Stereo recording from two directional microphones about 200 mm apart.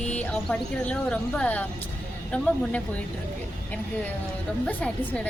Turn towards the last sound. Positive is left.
turn(degrees=5)  # may be behind; listen again after turning